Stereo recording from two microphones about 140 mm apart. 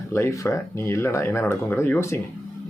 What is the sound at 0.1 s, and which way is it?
Speech, 20° left (ahead or behind).